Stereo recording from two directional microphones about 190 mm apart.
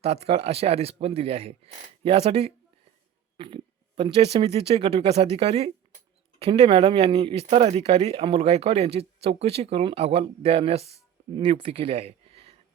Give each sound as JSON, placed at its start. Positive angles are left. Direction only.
{"t": 0.0, "sound": "speech", "side_deg": -35}